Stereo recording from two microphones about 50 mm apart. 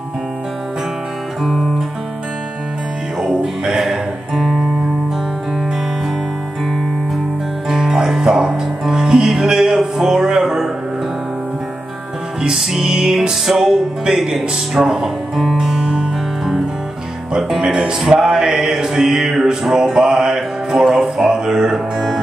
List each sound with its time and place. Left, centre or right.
1.4 s music: centre
3.2 s music: centre
7.7 s music: centre
12.8 s music: centre